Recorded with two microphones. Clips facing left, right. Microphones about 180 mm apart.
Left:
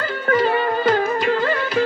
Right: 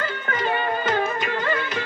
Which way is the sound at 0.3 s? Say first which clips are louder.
Left 8 dB; 40° left (ahead or behind).